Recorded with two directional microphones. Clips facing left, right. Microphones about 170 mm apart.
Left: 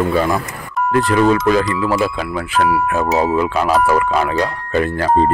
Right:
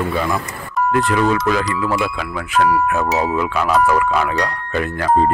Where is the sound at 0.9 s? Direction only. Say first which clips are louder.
Left 4 dB; 40° left (ahead or behind).